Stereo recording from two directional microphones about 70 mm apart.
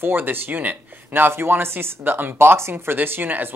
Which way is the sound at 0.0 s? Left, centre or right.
Right.